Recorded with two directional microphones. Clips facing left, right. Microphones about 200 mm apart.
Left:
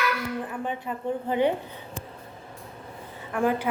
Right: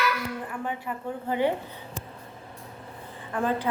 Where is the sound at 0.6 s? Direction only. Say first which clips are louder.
Left 2 dB; 20° left (ahead or behind).